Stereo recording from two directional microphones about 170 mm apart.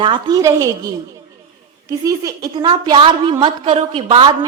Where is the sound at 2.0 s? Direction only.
20° right (ahead or behind).